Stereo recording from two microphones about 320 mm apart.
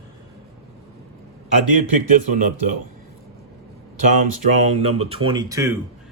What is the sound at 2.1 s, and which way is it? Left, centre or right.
Speech, right.